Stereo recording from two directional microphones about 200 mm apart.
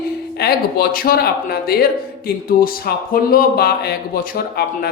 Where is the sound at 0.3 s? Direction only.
50° left (ahead or behind).